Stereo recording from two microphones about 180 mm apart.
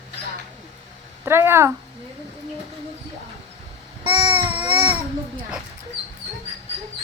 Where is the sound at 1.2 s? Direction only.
15° right (ahead or behind).